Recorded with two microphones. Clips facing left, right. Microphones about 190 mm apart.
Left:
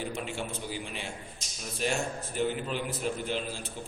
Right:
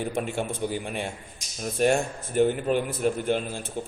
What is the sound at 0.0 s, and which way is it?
A man's voice, 50° right (ahead or behind).